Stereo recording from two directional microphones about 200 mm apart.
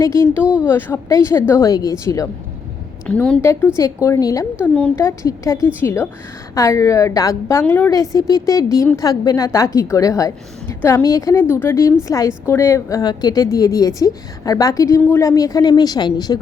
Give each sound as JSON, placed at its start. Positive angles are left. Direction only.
{"t": 0.4, "sound": "speech", "side_deg": -5}
{"t": 0.7, "sound": "a woman's voice", "side_deg": 10}